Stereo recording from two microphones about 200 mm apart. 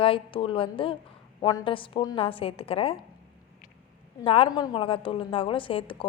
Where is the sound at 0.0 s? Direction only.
25° left (ahead or behind).